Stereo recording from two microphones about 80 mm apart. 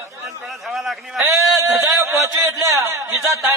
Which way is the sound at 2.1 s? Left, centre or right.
Right.